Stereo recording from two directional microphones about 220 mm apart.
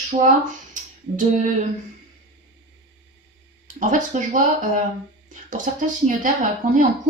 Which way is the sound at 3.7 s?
35° right (ahead or behind).